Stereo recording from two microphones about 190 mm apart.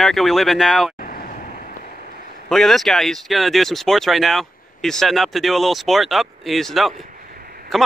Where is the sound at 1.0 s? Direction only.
45° left (ahead or behind).